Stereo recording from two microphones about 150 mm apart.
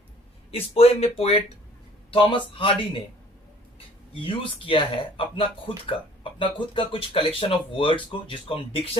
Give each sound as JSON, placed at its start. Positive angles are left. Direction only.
{"t": 0.5, "sound": "speech", "side_deg": 40}
{"t": 4.1, "sound": "speech", "side_deg": 35}